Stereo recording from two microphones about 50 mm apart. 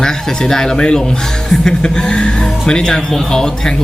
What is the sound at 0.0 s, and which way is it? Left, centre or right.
Speech, centre.